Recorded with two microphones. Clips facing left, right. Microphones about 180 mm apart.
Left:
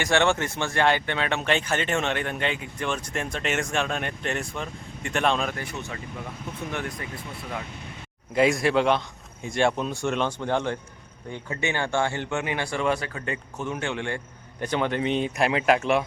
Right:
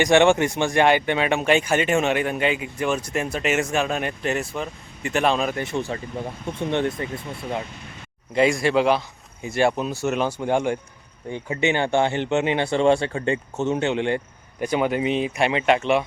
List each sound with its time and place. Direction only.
0.0 s speech: 15° right (ahead or behind)
5.5 s speech: 25° right (ahead or behind)
8.3 s speech: centre (ahead or behind); by 14.2 s 20° right (ahead or behind)
14.6 s speech: 10° right (ahead or behind)